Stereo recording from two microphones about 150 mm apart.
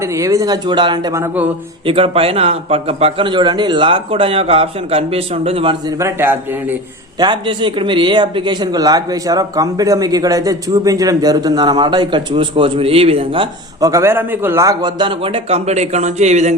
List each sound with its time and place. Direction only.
0.0 s a man's voice: 20° right (ahead or behind)
1.1 s a man's voice: 15° right (ahead or behind)
1.9 s a man's voice: 40° right (ahead or behind)
6.0 s a man's voice: 15° right (ahead or behind)
7.2 s a man's voice: 30° right (ahead or behind)
13.8 s a man's voice: 20° right (ahead or behind); by 16.6 s 50° right (ahead or behind)